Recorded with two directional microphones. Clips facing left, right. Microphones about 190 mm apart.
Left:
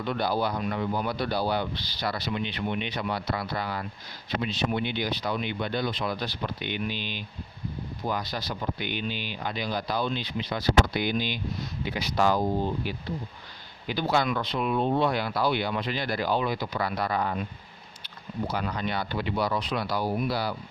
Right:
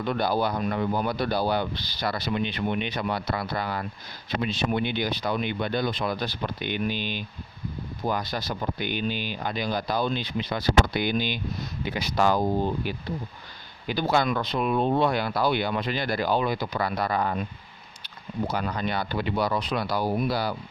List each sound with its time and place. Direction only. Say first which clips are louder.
0.0 s speech: right 2 dB; 50° right (ahead or behind)
18.4 s speech: right 2 dB; 45° right (ahead or behind)